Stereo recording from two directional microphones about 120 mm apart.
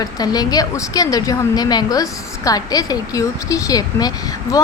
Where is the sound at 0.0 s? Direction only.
30° left (ahead or behind).